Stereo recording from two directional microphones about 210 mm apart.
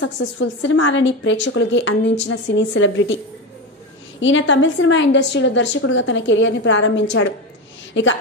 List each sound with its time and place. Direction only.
0.0 s a woman's voice: 60° left (ahead or behind)
4.2 s a woman's voice: 65° left (ahead or behind)